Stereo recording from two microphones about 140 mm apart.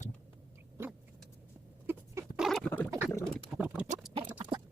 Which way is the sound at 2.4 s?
Centre (ahead or behind).